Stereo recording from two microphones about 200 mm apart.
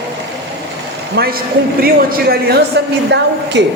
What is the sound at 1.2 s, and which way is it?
A man's voice, 50° right (ahead or behind).